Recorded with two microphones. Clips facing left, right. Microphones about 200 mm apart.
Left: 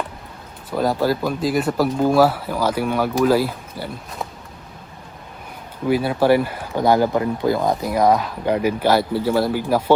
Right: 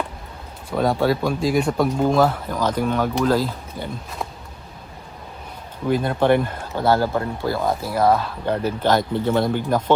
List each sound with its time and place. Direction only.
0.7 s speech: centre (ahead or behind)
5.9 s speech: 5° left (ahead or behind)